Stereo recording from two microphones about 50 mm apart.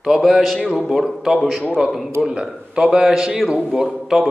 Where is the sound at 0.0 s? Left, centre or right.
Centre.